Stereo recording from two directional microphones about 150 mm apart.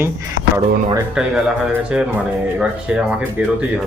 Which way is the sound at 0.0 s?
15° right (ahead or behind).